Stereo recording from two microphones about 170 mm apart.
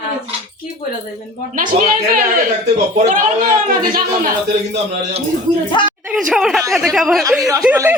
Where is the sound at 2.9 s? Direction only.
50° right (ahead or behind).